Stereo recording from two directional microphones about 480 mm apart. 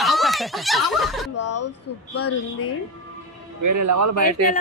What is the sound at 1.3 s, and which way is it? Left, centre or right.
Speech, left.